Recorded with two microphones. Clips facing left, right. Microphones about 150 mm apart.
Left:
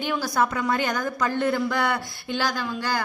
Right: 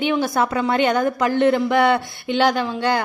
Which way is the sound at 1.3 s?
80° right.